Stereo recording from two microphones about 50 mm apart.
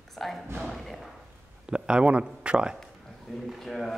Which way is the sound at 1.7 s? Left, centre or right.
Centre.